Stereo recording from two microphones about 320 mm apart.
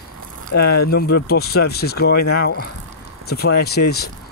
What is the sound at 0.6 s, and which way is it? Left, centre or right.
Speech, left.